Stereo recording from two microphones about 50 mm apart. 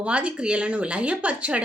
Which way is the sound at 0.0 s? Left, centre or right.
Right.